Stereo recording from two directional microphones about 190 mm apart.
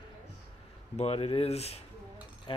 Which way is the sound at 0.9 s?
35° left (ahead or behind).